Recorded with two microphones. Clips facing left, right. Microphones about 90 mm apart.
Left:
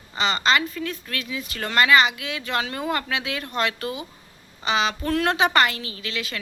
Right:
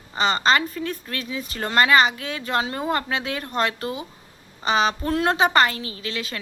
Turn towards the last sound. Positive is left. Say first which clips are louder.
# right 1 dB
turn(degrees=-35)  # may be behind; listen again after turning